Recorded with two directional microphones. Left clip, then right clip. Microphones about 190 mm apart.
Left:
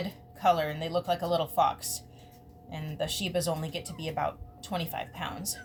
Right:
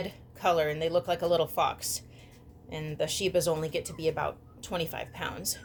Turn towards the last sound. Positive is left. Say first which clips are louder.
# right 1 dB
turn(degrees=-50)  # may be behind; listen again after turning